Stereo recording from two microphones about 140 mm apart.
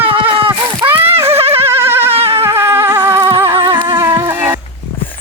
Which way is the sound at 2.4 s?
15° right (ahead or behind).